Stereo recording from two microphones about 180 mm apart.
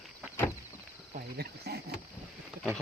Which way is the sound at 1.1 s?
60° right (ahead or behind).